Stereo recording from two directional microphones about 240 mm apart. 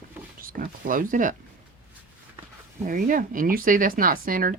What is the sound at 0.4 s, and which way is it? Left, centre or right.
Speech, right.